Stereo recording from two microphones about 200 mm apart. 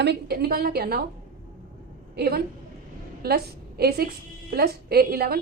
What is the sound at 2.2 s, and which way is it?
A woman's voice, 50° right (ahead or behind).